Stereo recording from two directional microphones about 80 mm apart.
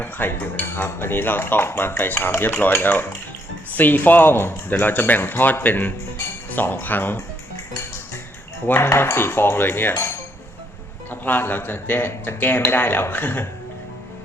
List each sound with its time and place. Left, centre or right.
0.0 s cutlery: left
8.6 s cutlery: left